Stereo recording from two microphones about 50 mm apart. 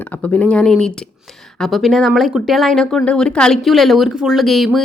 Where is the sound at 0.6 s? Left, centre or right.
Centre.